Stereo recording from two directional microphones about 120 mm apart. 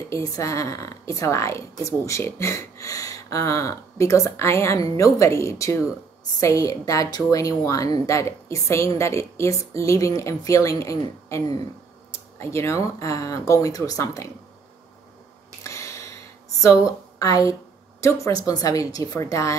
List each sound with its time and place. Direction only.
0.1 s speech: 25° left (ahead or behind)
15.6 s a sound: 25° left (ahead or behind)
16.6 s a woman's voice: 25° left (ahead or behind)